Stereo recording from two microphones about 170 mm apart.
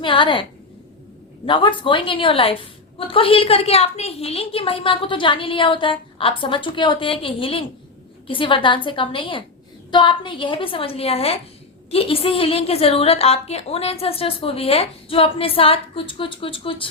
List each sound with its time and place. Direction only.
0.0 s a woman's voice: 30° left (ahead or behind)
1.5 s a woman's voice: 30° left (ahead or behind)